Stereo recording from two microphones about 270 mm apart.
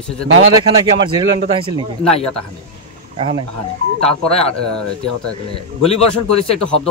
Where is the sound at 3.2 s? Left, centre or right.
Centre.